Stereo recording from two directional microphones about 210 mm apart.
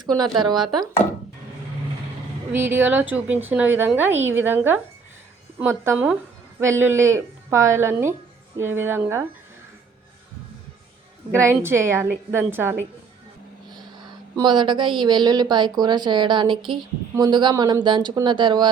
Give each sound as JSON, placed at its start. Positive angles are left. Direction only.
{"t": 0.0, "sound": "speech", "side_deg": -20}
{"t": 2.5, "sound": "a woman's voice", "side_deg": -10}
{"t": 11.3, "sound": "a woman's voice", "side_deg": -10}